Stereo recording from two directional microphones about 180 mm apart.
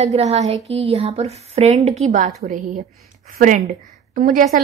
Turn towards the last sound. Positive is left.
turn(degrees=-45)  # may be behind; listen again after turning